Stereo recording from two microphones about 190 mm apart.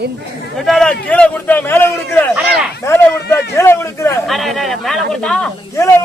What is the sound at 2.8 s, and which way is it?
A man's voice, 15° left (ahead or behind).